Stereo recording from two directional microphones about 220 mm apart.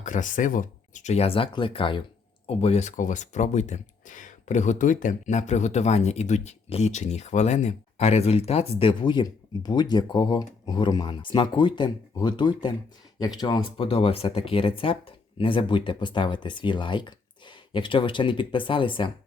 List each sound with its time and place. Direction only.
0.0 s speech: 35° left (ahead or behind)